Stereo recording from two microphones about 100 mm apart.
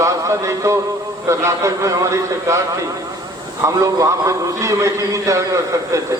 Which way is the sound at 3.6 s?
30° right (ahead or behind).